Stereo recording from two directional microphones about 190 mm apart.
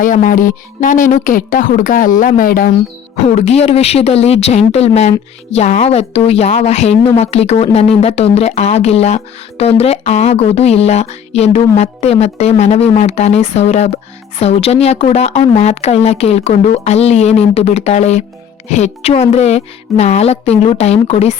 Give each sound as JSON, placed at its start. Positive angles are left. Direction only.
{"t": 0.0, "sound": "speech", "side_deg": 45}
{"t": 3.2, "sound": "speech", "side_deg": 35}